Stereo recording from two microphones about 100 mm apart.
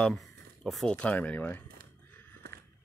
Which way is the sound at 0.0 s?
Centre (ahead or behind).